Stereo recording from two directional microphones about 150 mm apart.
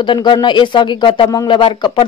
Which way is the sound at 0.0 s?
30° left (ahead or behind).